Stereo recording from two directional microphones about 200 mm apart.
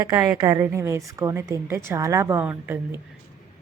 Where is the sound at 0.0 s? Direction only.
15° right (ahead or behind).